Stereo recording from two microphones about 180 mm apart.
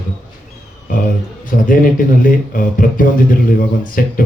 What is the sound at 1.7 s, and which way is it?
A man's voice, 50° left (ahead or behind).